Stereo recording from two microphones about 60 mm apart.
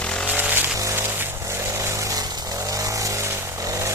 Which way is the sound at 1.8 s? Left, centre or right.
Right.